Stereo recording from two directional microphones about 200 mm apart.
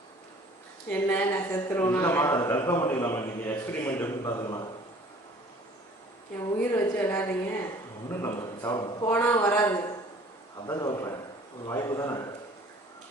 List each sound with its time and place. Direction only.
0.9 s speech: 10° left (ahead or behind)
6.6 s a man's voice: 10° left (ahead or behind)
9.0 s a man's voice: 10° left (ahead or behind)